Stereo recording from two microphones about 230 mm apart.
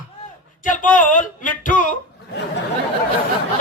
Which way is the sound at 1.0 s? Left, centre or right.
Left.